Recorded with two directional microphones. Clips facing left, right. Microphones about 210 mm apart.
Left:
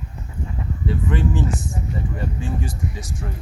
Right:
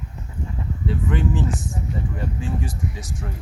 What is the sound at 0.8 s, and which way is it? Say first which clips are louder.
Speech: left 1 dB; centre (ahead or behind).